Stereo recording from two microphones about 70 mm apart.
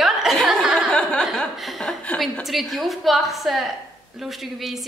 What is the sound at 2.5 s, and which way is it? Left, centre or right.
A woman's voice, centre.